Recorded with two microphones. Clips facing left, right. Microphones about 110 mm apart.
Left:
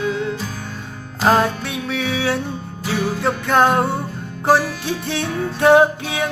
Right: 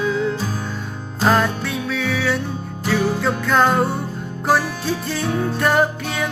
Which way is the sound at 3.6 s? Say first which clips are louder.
Left 1 dB; 15° left (ahead or behind).